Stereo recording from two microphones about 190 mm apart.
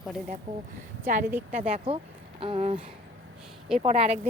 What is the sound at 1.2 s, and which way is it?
Speech, 10° right (ahead or behind).